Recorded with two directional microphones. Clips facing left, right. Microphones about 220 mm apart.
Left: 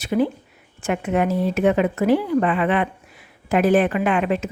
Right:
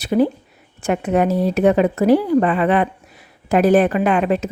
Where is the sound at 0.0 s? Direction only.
35° right (ahead or behind).